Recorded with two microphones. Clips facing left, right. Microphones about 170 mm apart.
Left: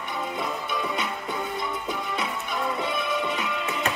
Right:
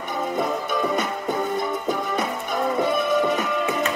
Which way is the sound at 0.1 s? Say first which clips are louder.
Right 6 dB; 45° right (ahead or behind).